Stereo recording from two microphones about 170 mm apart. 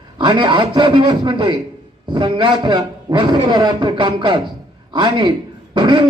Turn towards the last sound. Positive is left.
turn(degrees=-25)  # may be behind; listen again after turning